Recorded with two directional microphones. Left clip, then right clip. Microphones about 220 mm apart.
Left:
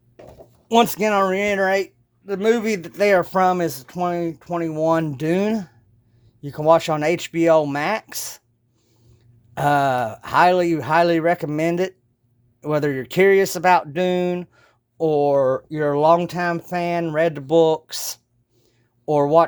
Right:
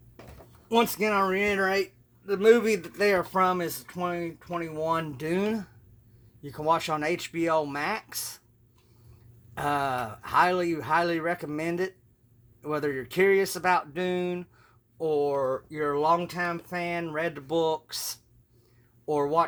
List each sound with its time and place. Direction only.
0.7 s speech: 45° left (ahead or behind)
9.6 s speech: 40° left (ahead or behind)